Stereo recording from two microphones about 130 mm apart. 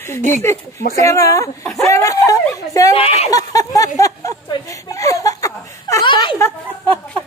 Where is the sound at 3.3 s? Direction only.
25° left (ahead or behind).